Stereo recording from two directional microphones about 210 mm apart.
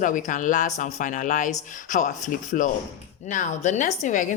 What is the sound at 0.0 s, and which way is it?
Speech, 40° left (ahead or behind).